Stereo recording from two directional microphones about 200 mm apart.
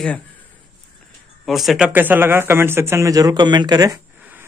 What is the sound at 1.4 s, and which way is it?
Speech, centre (ahead or behind).